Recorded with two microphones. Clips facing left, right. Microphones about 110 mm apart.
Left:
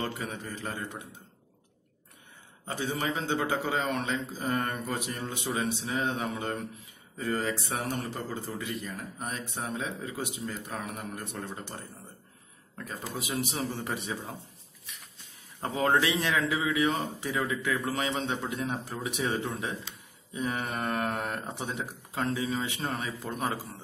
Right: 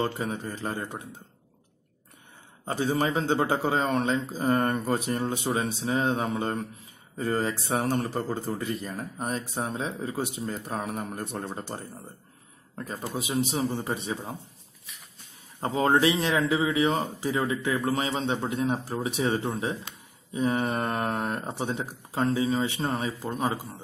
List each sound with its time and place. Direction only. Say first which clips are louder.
0.0 s speech: right 6 dB; 30° right (ahead or behind)
2.6 s speech: right 6 dB; 35° right (ahead or behind)
3.3 s speech: right 4 dB; 35° right (ahead or behind)
15.6 s speech: right 4 dB; 25° right (ahead or behind)
23.2 s speech: right 2 dB; 20° right (ahead or behind)